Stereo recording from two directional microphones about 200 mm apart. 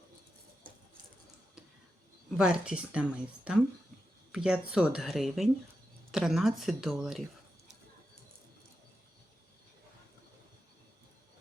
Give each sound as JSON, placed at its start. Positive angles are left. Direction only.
{"t": 2.4, "sound": "speech", "side_deg": -5}